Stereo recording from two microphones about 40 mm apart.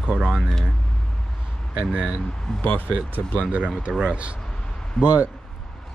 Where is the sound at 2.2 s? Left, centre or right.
Centre.